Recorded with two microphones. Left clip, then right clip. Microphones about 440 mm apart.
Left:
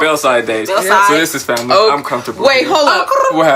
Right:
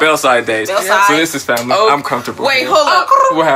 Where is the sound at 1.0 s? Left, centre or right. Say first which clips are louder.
Even; right.